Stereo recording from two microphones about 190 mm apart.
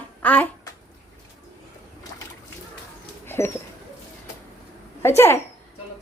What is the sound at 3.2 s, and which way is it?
Bird, 10° left (ahead or behind).